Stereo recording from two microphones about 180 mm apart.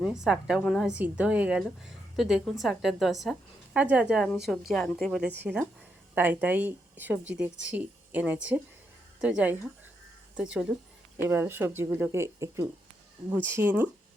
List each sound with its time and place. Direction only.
0.0 s a woman's voice: 5° right (ahead or behind)